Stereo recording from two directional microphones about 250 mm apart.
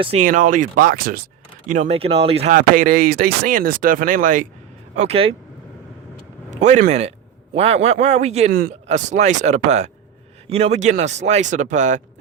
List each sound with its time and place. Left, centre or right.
0.0 s a man's voice: right
6.5 s a man's voice: right